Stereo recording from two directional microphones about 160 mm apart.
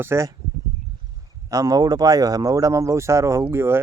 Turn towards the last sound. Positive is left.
turn(degrees=-15)  # may be behind; listen again after turning